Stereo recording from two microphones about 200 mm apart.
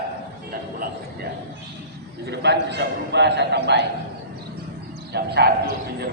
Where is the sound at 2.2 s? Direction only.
60° right (ahead or behind).